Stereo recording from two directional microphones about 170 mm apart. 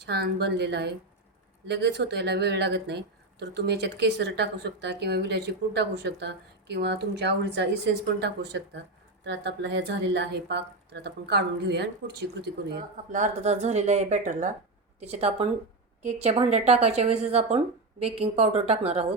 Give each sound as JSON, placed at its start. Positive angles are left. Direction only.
{"t": 0.0, "sound": "speech", "side_deg": -75}
{"t": 13.1, "sound": "a woman's voice", "side_deg": -45}